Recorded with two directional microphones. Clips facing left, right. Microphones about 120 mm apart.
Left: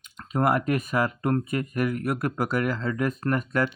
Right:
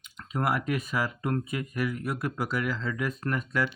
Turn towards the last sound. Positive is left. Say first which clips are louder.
# left 4 dB
turn(degrees=50)  # may be behind; listen again after turning